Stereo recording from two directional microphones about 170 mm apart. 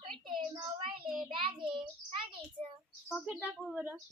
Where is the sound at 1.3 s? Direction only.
30° right (ahead or behind).